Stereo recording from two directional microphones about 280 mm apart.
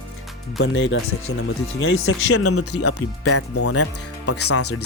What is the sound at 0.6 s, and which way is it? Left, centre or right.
Speech, left.